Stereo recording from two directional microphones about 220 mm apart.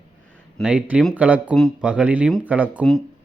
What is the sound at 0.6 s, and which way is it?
A man's voice, 5° right (ahead or behind).